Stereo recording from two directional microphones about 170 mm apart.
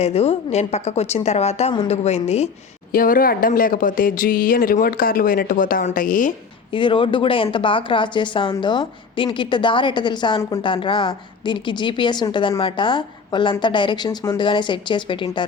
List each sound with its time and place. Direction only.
0.0 s a woman's voice: 35° left (ahead or behind)
2.9 s speech: 55° left (ahead or behind)
6.7 s speech: 30° left (ahead or behind)